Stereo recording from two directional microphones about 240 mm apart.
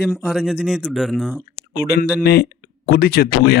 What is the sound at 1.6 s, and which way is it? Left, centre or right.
Speech, left.